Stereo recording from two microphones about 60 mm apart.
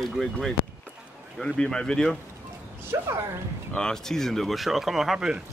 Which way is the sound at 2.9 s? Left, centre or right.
Right.